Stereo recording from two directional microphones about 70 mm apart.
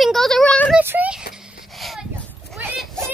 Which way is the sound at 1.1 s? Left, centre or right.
Centre.